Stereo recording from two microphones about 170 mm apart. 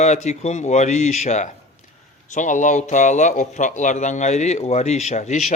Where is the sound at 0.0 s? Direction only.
40° left (ahead or behind).